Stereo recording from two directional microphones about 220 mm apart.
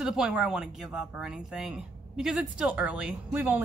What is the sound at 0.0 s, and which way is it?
A woman's voice, 5° right (ahead or behind).